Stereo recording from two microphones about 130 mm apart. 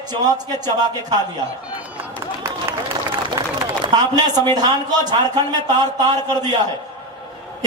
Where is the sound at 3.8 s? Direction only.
35° right (ahead or behind).